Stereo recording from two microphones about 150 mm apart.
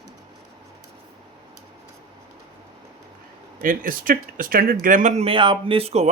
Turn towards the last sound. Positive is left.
turn(degrees=-45)  # may be behind; listen again after turning